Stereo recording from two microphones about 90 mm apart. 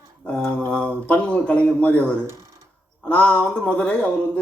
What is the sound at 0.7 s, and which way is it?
Speech, 10° left (ahead or behind).